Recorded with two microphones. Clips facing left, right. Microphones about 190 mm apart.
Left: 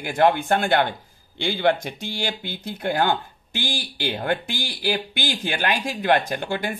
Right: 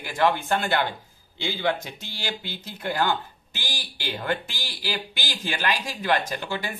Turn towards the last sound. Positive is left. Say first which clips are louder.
# left 4 dB
turn(degrees=50)  # may be behind; listen again after turning